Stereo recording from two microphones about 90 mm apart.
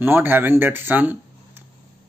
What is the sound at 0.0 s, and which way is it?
Speech, 25° right (ahead or behind).